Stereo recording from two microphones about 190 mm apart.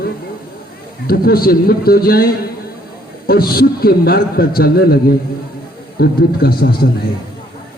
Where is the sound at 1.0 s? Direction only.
50° left (ahead or behind).